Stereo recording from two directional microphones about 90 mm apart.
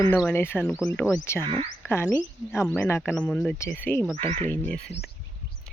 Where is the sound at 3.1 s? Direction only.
10° left (ahead or behind).